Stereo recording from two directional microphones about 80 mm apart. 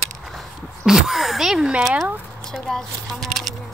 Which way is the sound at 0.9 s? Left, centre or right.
Centre.